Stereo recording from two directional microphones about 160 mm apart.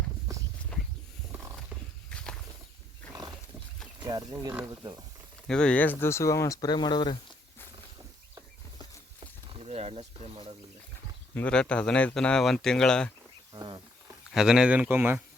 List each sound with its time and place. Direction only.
0.7 s a sound: 5° left (ahead or behind)
2.0 s walk: 5° left (ahead or behind)
4.0 s speech: 25° right (ahead or behind)
4.4 s speech: 10° right (ahead or behind)
4.7 s speech: 25° right (ahead or behind)
5.5 s speech: 5° left (ahead or behind); by 7.2 s 30° left (ahead or behind)
9.5 s speech: 40° right (ahead or behind)
11.3 s speech: 5° left (ahead or behind)
13.5 s speech: 25° right (ahead or behind)
14.3 s speech: 5° right (ahead or behind)